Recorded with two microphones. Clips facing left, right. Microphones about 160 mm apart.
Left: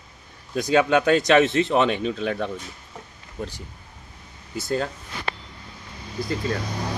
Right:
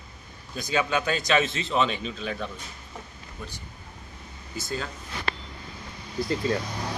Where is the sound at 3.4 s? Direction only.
90° left.